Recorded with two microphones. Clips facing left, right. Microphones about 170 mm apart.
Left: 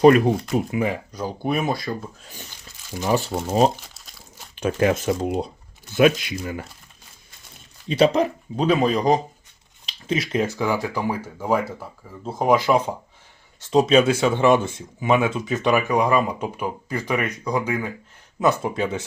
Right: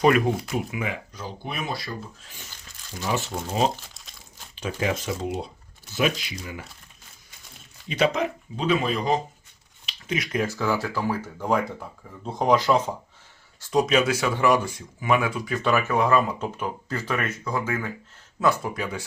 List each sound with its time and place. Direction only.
0.5 s speech: 35° left (ahead or behind)
3.1 s speech: 35° left (ahead or behind)
3.8 s crumpling: 5° left (ahead or behind)
4.5 s speech: 55° left (ahead or behind)
6.0 s speech: 55° left (ahead or behind)
7.9 s speech: 35° left (ahead or behind)
9.8 s speech: 30° left (ahead or behind); by 12.9 s 10° left (ahead or behind)
13.6 s speech: 25° left (ahead or behind)